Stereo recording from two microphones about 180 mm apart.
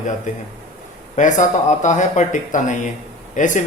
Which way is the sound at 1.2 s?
45° left (ahead or behind).